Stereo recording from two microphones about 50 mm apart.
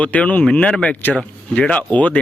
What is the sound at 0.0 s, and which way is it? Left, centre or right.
Speech, left.